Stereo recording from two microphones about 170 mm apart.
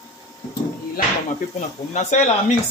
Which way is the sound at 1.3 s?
45° left (ahead or behind).